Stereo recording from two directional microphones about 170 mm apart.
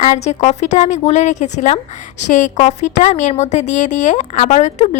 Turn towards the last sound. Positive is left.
turn(degrees=40)  # may be behind; listen again after turning